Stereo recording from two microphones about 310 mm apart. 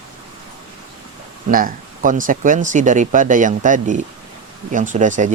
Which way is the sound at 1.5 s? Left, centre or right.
Right.